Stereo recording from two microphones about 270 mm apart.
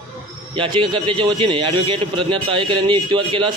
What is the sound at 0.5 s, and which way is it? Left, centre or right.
A man's voice, centre.